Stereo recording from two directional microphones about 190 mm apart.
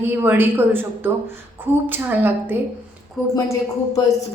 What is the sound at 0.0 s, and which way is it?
A woman's voice, 10° right (ahead or behind).